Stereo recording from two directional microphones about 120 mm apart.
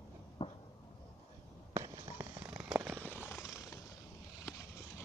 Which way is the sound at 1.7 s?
25° right (ahead or behind).